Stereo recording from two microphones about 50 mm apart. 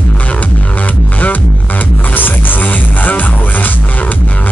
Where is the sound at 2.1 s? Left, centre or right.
Left.